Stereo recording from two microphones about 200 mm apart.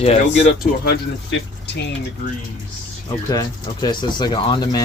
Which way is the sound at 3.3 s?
20° left (ahead or behind).